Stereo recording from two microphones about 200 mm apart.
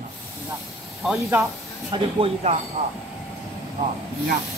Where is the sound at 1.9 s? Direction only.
20° right (ahead or behind).